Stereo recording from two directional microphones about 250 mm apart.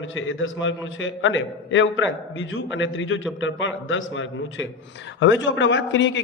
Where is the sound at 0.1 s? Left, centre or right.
Left.